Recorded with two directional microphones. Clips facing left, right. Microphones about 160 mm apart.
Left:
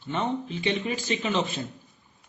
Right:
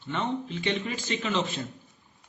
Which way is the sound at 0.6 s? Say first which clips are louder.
Left 2 dB; 15° left (ahead or behind).